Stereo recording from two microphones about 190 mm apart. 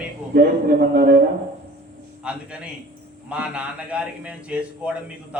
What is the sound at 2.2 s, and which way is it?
A man's voice, 5° right (ahead or behind).